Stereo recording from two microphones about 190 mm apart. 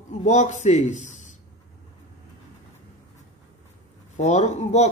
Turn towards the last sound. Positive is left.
turn(degrees=35)  # may be behind; listen again after turning